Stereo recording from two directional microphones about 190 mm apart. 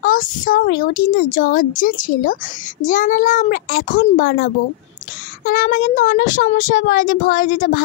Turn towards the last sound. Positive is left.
turn(degrees=45)  # may be behind; listen again after turning